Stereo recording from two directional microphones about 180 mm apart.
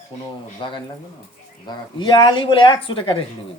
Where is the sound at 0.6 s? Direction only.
25° left (ahead or behind).